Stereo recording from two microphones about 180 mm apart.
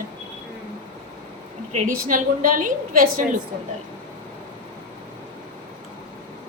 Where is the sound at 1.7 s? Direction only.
50° right (ahead or behind).